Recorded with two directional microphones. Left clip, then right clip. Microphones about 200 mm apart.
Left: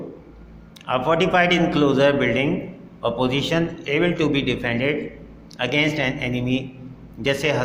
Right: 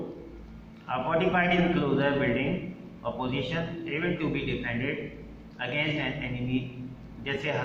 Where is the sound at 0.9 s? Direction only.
50° left (ahead or behind).